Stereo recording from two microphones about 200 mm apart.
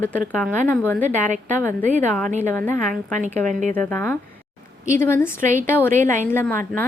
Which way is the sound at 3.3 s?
40° right (ahead or behind).